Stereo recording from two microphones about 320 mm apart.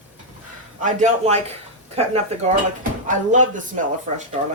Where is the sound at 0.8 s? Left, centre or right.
Right.